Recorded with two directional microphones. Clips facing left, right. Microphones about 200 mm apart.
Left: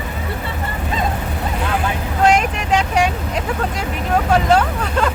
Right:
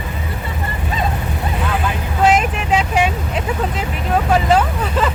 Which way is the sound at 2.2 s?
5° right (ahead or behind).